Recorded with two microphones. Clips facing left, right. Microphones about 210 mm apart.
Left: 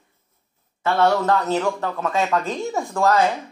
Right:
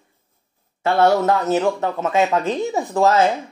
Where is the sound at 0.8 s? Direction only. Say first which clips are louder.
Right 3 dB; 25° right (ahead or behind).